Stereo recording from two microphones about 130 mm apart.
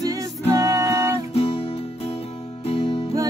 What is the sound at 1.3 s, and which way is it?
Music, 50° left (ahead or behind).